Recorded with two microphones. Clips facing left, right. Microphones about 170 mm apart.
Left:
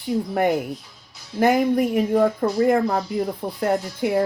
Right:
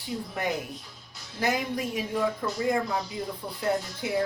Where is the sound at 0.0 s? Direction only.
55° left (ahead or behind).